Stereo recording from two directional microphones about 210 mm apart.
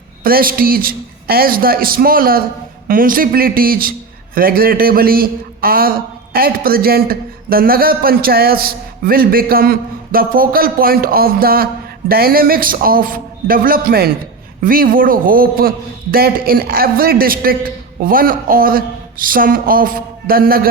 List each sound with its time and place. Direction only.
0.2 s a man's voice: 45° right (ahead or behind)